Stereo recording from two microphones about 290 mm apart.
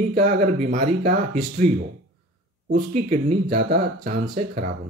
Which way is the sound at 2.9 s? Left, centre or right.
Right.